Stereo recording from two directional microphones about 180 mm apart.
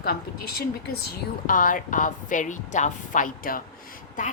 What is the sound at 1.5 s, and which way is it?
A woman's voice, 50° left (ahead or behind).